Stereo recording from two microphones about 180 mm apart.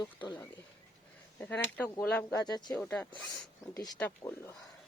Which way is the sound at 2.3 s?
20° left (ahead or behind).